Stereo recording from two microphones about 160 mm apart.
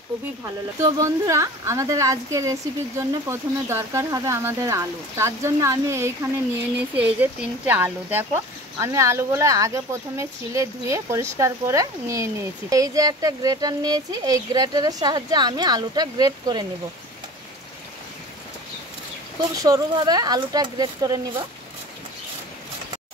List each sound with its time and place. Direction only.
0.7 s speech: 20° right (ahead or behind)
19.5 s speech: 20° right (ahead or behind)